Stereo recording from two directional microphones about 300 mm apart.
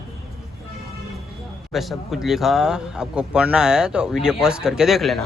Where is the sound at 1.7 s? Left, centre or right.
Centre.